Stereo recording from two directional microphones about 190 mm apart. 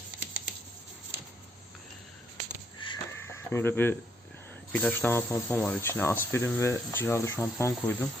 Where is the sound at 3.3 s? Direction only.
10° left (ahead or behind).